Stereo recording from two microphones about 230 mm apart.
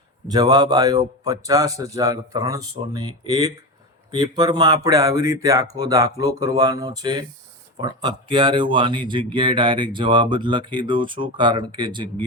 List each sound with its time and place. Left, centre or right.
0.3 s a man's voice: centre